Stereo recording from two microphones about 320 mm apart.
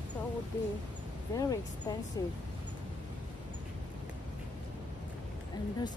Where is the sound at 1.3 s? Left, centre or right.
Centre.